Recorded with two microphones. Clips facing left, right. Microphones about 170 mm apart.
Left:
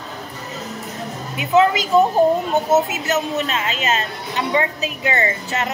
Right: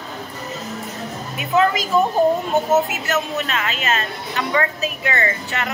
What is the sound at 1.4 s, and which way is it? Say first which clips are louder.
A woman's voice: left 3 dB; 20° left (ahead or behind).